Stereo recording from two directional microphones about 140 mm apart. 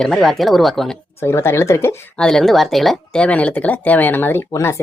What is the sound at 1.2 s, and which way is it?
Speech, 15° left (ahead or behind).